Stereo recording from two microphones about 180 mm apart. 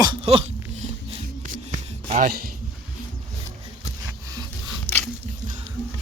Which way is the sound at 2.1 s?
50° right (ahead or behind).